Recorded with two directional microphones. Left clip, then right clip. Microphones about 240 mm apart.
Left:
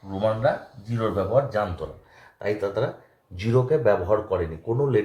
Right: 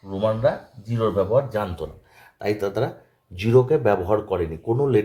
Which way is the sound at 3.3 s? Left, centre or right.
Right.